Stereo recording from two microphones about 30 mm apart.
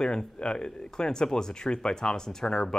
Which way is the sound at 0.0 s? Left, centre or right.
Left.